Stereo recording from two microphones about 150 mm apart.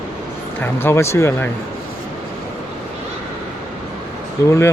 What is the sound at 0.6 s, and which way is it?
Speech, 15° left (ahead or behind).